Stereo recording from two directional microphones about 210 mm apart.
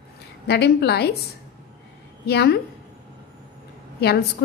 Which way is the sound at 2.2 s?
50° left (ahead or behind).